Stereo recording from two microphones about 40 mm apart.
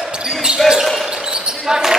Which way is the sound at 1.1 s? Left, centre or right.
Right.